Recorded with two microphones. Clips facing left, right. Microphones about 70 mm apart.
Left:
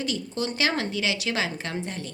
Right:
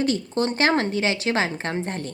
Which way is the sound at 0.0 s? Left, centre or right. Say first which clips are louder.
Right 6 dB; right.